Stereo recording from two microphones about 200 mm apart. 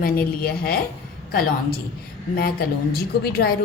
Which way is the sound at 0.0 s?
50° left (ahead or behind).